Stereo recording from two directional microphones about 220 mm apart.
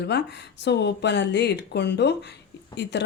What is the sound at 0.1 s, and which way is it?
Speech, 50° left (ahead or behind).